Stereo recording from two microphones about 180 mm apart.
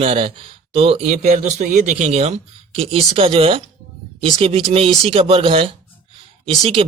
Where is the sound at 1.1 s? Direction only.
45° right (ahead or behind).